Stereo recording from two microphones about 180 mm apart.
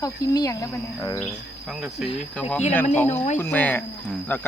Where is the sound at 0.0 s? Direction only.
20° left (ahead or behind).